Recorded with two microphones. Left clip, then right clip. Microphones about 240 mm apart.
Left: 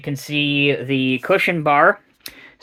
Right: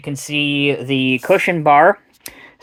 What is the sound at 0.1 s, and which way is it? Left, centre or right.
Speech, right.